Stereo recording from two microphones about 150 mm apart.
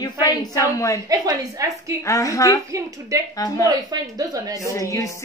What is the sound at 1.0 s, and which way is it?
Speech, 25° right (ahead or behind).